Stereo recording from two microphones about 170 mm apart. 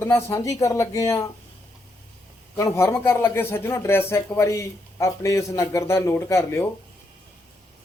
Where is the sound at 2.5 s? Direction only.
15° left (ahead or behind).